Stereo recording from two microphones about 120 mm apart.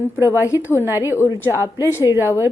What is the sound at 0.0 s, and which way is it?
A woman's voice, 25° left (ahead or behind).